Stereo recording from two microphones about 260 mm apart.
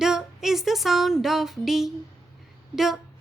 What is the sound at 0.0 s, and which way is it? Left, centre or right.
Music, centre.